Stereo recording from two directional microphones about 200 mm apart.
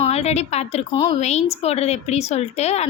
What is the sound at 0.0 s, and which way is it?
A woman's voice, 30° left (ahead or behind).